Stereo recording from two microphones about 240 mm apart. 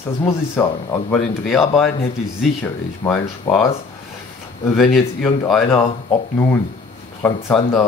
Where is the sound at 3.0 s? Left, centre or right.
Centre.